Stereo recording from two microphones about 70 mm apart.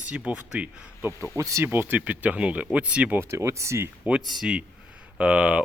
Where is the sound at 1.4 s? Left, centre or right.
Right.